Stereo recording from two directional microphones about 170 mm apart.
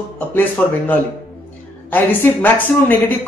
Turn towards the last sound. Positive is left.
turn(degrees=10)  # may be behind; listen again after turning